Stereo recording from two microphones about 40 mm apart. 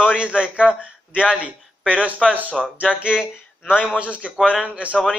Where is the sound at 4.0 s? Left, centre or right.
Right.